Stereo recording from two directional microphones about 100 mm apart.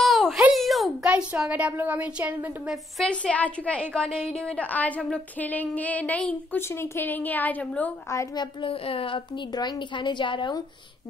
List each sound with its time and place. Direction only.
0.0 s a sound: centre (ahead or behind)
1.0 s a woman's voice: 10° right (ahead or behind)
3.0 s a woman's voice: 10° left (ahead or behind)
8.4 s a child's voice: 65° left (ahead or behind)
9.5 s a woman's voice: 45° left (ahead or behind)